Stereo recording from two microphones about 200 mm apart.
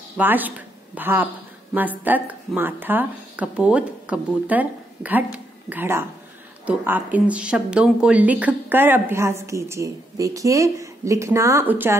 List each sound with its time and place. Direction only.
0.2 s a woman's voice: 10° right (ahead or behind)